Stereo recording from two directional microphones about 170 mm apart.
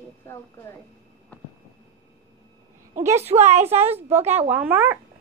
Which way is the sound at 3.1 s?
40° right (ahead or behind).